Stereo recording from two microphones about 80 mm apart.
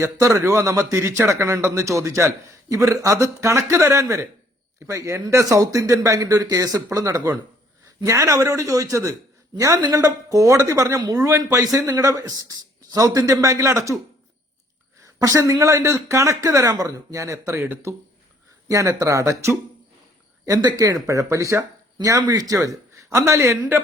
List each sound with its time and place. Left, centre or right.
0.0 s speech: right
15.0 s speech: right
18.7 s speech: right
20.7 s a man's voice: right
23.6 s a man's voice: right